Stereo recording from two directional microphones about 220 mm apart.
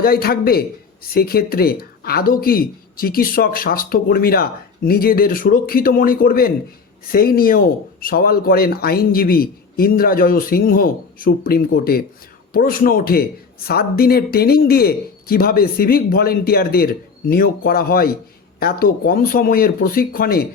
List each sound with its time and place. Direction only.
0.0 s speech: 45° left (ahead or behind)